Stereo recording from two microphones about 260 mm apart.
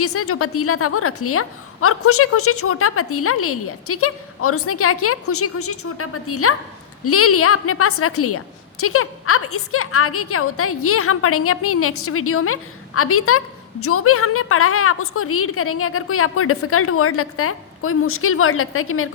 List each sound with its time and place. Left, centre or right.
0.0 s a woman's voice: left